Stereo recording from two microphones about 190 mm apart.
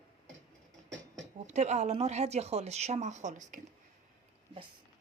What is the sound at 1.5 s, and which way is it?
Speech, 35° right (ahead or behind).